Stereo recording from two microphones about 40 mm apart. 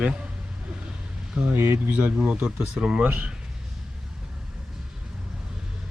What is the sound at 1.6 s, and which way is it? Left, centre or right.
Speech, right.